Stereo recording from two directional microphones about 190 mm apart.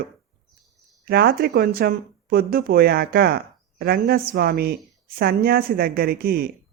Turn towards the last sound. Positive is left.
turn(degrees=-55)  # may be behind; listen again after turning